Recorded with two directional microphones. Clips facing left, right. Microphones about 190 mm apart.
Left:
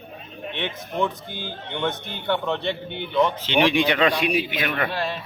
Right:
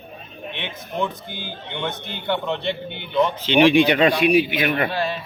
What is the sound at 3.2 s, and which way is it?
A man's voice, 20° right (ahead or behind).